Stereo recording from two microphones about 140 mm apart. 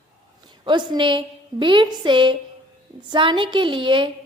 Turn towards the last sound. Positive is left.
turn(degrees=-35)  # may be behind; listen again after turning